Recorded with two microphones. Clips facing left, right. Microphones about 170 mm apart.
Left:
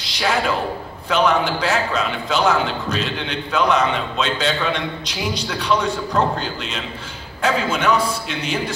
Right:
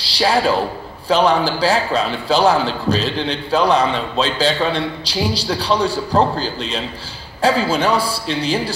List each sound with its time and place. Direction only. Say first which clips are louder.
0.0 s a man's voice: right 4 dB; 35° right (ahead or behind)